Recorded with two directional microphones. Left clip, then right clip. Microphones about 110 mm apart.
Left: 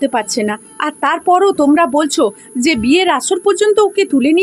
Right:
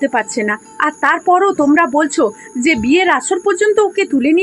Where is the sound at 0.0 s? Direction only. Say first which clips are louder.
Even; 30° left (ahead or behind).